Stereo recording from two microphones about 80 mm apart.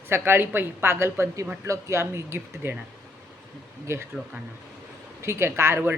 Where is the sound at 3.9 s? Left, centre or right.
Right.